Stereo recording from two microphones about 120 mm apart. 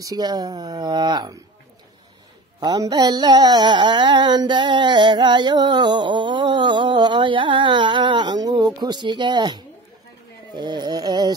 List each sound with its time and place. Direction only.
0.0 s music: 35° right (ahead or behind)
2.6 s music: 35° right (ahead or behind)